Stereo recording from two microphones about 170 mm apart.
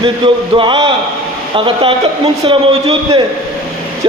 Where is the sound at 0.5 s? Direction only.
30° right (ahead or behind).